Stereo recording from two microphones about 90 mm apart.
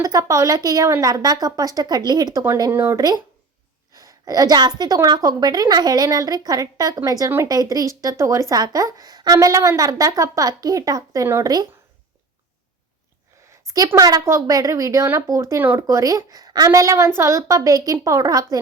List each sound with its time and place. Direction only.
0.0 s a woman's voice: 40° right (ahead or behind)
13.7 s a woman's voice: 45° right (ahead or behind); by 15.8 s 25° right (ahead or behind)
15.9 s a woman's voice: 35° right (ahead or behind)